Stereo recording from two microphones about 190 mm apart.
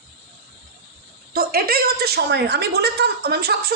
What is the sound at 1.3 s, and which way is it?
A woman's voice, 50° right (ahead or behind).